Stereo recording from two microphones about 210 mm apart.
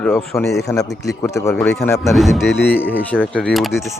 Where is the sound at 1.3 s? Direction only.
15° left (ahead or behind).